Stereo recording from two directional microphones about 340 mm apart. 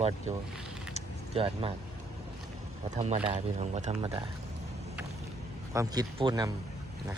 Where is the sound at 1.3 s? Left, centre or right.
Centre.